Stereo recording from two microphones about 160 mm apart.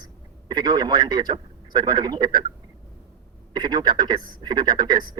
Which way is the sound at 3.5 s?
25° right (ahead or behind).